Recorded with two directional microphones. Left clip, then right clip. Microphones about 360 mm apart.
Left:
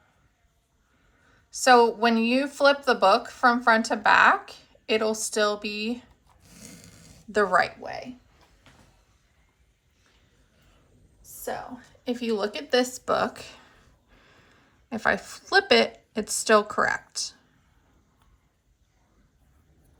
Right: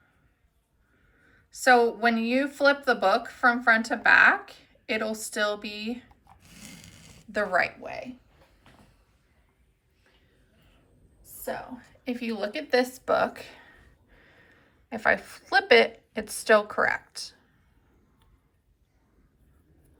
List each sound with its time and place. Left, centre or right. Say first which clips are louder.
1.5 s a woman's voice: left 2 dB; centre
6.5 s a sound: even; centre
6.8 s a sound: right 1 dB; right
7.3 s speech: left 3 dB; centre
11.4 s speech: left 1 dB; centre
14.8 s speech: right 1 dB; centre